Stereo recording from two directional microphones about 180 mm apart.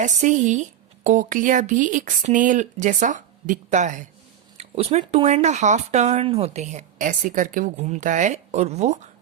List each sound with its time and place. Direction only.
0.0 s a woman's voice: 45° right (ahead or behind)